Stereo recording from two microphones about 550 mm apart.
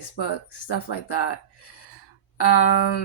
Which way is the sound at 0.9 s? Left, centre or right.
Left.